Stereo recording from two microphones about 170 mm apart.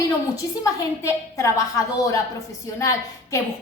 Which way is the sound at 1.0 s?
15° left (ahead or behind).